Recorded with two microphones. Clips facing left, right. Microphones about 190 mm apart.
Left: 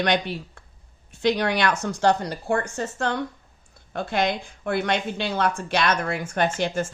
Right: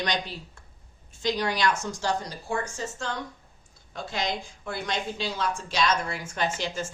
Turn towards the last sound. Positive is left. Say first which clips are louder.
# left 6 dB
turn(degrees=55)  # may be behind; listen again after turning